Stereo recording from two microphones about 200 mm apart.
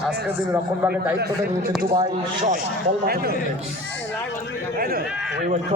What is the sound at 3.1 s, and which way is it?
Speech, 50° right (ahead or behind).